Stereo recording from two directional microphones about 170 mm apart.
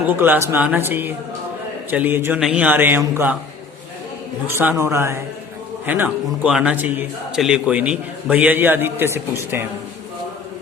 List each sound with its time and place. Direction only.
0.1 s a man's voice: 10° right (ahead or behind)
4.4 s a man's voice: 10° right (ahead or behind)